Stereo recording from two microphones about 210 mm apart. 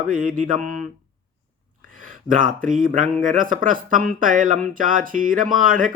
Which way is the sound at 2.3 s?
40° right (ahead or behind).